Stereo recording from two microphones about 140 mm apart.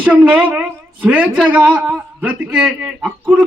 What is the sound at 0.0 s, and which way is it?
A woman's voice, 10° right (ahead or behind).